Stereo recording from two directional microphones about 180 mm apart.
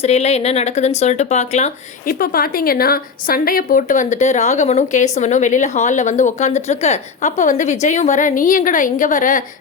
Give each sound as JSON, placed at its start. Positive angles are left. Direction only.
{"t": 0.0, "sound": "speech", "side_deg": 35}
{"t": 2.0, "sound": "a woman's voice", "side_deg": 55}